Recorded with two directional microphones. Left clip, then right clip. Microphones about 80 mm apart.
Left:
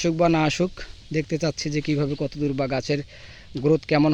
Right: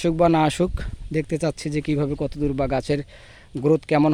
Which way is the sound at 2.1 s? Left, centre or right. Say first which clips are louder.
Right 1 dB; right.